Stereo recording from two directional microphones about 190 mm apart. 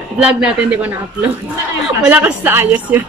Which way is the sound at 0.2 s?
5° right (ahead or behind).